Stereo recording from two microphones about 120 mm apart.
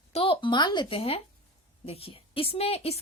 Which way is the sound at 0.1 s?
50° left (ahead or behind).